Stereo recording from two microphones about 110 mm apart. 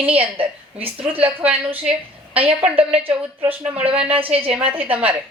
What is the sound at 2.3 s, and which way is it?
Speech, 60° right (ahead or behind).